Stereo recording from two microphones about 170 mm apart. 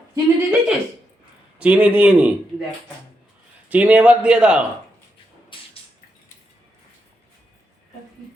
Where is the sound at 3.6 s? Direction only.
10° right (ahead or behind).